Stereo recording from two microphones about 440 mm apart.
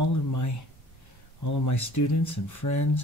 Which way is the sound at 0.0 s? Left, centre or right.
Left.